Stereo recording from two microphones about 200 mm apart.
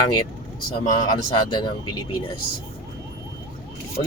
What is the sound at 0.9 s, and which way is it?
Speech, 30° left (ahead or behind).